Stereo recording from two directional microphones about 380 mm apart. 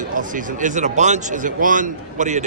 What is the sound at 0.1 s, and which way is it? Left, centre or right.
A man's voice, right.